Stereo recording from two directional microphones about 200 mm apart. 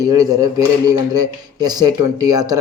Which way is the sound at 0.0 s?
20° right (ahead or behind).